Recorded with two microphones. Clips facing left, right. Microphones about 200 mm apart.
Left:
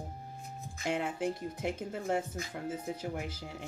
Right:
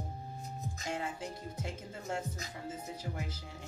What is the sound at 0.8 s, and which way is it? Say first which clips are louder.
Speech: left 7 dB; 65° left (ahead or behind).